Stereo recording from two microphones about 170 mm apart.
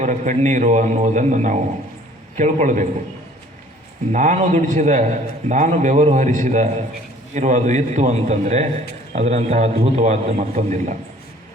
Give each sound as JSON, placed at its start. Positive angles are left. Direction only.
{"t": 0.0, "sound": "a man's voice", "side_deg": -45}
{"t": 4.1, "sound": "a man's voice", "side_deg": -45}